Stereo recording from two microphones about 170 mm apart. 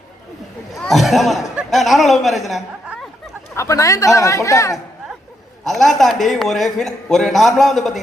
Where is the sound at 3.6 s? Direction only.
20° left (ahead or behind).